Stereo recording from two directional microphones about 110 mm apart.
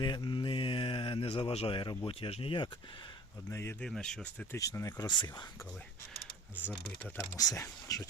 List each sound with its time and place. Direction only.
0.0 s a sound: 45° left (ahead or behind)
2.0 s speech: 55° left (ahead or behind)
3.5 s speech: 25° left (ahead or behind)
3.8 s speech: 5° left (ahead or behind)
4.5 s speech: 30° left (ahead or behind); by 5.5 s 45° left (ahead or behind)
7.3 s speech: 30° left (ahead or behind)